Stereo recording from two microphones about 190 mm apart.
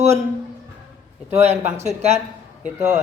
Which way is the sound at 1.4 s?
35° right (ahead or behind).